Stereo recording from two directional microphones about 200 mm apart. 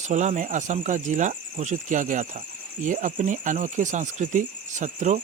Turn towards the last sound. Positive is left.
turn(degrees=-40)  # may be behind; listen again after turning